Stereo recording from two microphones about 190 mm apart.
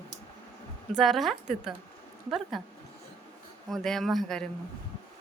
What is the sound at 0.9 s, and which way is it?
Speech, centre (ahead or behind).